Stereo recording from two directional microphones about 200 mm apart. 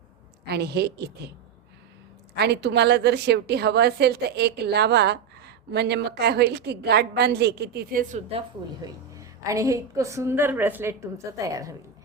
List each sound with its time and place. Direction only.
0.4 s a woman's voice: 55° right (ahead or behind)
2.3 s a woman's voice: 55° right (ahead or behind)
8.3 s a woman's voice: 25° right (ahead or behind)
9.1 s a woman's voice: 15° right (ahead or behind)